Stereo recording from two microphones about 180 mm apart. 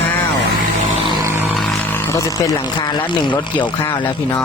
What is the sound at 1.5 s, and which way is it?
Roaring cats, 5° left (ahead or behind).